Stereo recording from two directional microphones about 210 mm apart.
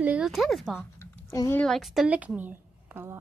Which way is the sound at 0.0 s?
5° right (ahead or behind).